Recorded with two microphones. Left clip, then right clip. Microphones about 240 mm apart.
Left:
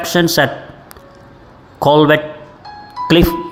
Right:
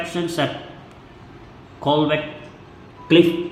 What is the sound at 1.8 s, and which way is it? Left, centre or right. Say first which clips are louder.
Speech: left 9 dB; left.